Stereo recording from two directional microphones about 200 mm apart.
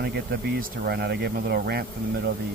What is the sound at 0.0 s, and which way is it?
Speech, 50° right (ahead or behind).